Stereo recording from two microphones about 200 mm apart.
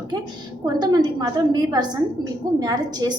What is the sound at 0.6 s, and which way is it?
A woman's voice, 20° right (ahead or behind).